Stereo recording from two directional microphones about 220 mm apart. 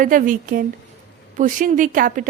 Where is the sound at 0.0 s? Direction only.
35° right (ahead or behind).